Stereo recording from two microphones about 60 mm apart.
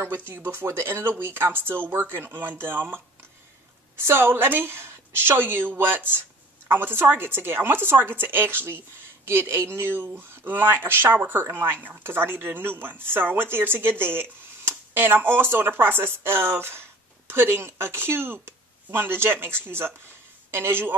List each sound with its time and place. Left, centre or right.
0.0 s speech: right
4.0 s speech: right